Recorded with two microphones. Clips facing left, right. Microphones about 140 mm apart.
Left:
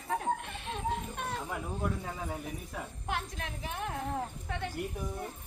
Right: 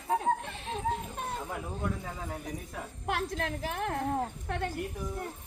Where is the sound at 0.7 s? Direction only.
35° right (ahead or behind).